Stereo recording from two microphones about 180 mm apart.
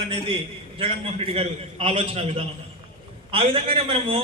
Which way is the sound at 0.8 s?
30° right (ahead or behind).